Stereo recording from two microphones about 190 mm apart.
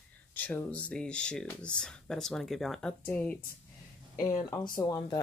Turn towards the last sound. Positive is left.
turn(degrees=20)  # may be behind; listen again after turning